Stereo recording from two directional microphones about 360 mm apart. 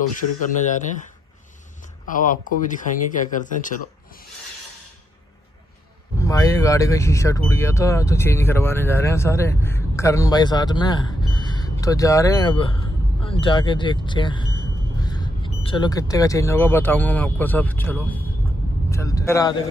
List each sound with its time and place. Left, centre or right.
2.0 s speech: left
6.1 s speech: centre